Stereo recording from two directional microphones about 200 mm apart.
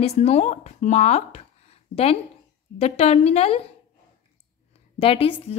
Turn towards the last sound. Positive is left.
turn(degrees=30)  # may be behind; listen again after turning